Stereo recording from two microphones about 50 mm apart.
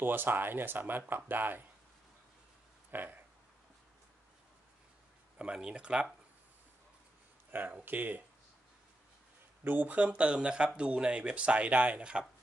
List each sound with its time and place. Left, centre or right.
0.0 s speech: right
2.9 s speech: right
5.4 s speech: centre
7.8 s speech: right
9.7 s speech: right